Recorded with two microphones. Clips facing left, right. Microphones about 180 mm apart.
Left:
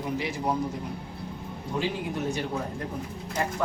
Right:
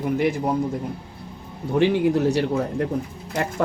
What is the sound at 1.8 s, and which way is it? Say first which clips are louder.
Speech: right 12 dB; 70° right (ahead or behind).